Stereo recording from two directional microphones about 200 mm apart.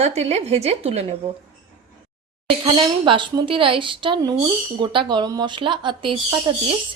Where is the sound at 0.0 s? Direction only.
35° right (ahead or behind).